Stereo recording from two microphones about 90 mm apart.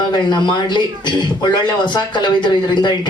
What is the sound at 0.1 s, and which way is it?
Speech, 55° left (ahead or behind).